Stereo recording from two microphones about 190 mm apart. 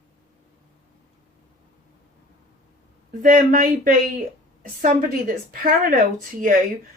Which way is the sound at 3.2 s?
45° right (ahead or behind).